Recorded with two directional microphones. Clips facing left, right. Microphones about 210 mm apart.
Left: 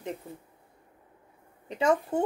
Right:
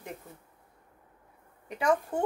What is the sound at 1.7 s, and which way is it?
Speech, 25° left (ahead or behind).